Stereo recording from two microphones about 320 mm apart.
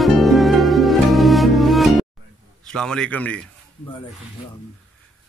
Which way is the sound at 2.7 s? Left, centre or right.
Centre.